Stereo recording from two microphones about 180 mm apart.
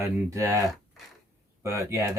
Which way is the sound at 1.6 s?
15° right (ahead or behind).